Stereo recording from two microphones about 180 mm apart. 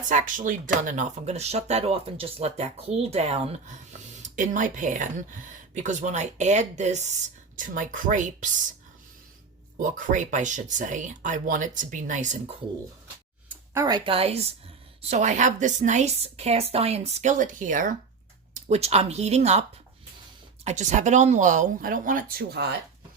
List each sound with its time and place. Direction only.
0.1 s speech: 45° right (ahead or behind)
9.7 s speech: 45° right (ahead or behind)
13.7 s speech: 20° right (ahead or behind); by 19.6 s 40° right (ahead or behind)
20.7 s speech: 40° right (ahead or behind); by 22.7 s 60° right (ahead or behind)